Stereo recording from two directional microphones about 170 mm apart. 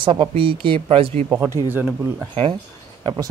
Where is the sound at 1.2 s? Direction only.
15° right (ahead or behind).